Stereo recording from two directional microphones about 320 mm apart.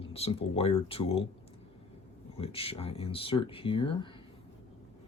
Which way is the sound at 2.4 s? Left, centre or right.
Centre.